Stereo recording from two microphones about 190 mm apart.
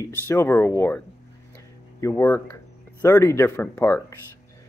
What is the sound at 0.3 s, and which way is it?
Speech, 15° left (ahead or behind).